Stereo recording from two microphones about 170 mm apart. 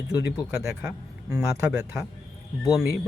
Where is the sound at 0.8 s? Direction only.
5° right (ahead or behind).